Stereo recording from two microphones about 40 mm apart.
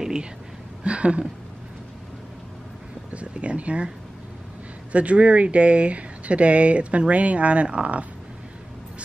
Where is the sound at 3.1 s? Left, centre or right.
Right.